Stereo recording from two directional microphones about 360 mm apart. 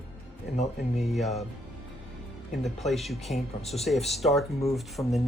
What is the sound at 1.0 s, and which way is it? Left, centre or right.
Speech, centre.